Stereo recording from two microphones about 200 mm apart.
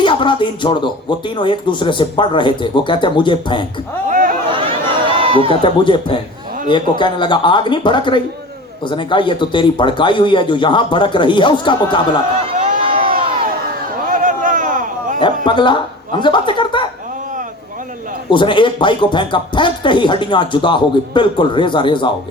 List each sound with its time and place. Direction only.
0.0 s speech: 25° left (ahead or behind)
4.1 s a sound: 40° right (ahead or behind)
4.5 s run: 25° right (ahead or behind)
5.5 s speech: 25° left (ahead or behind)
13.0 s crowd: 45° right (ahead or behind)
14.1 s a sound: 40° right (ahead or behind)
15.4 s speech: 25° left (ahead or behind)
18.3 s speech: 25° left (ahead or behind)